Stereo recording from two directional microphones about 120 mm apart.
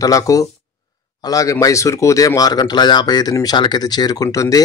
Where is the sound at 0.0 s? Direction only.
30° left (ahead or behind).